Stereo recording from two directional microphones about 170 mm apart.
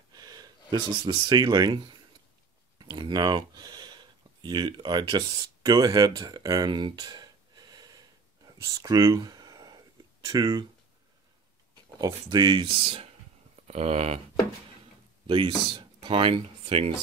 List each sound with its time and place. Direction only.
0.1 s speech: 25° right (ahead or behind)
12.0 s speech: 25° right (ahead or behind)
15.2 s speech: 30° right (ahead or behind)